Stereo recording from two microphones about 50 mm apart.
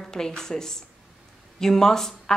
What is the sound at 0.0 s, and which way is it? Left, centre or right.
A woman's voice, centre.